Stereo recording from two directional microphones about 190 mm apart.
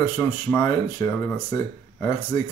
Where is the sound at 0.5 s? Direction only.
15° left (ahead or behind).